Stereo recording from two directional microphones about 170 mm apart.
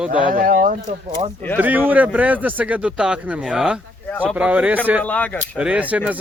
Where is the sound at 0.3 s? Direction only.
55° right (ahead or behind).